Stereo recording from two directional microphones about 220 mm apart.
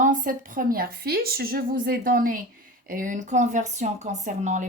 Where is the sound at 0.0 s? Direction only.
35° right (ahead or behind).